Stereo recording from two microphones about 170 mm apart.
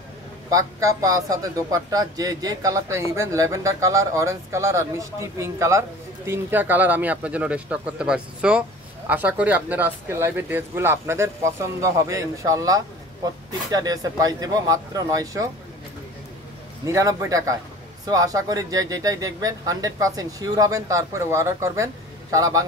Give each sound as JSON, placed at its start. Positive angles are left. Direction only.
{"t": 0.5, "sound": "a man's voice", "side_deg": -20}
{"t": 16.8, "sound": "speech", "side_deg": -15}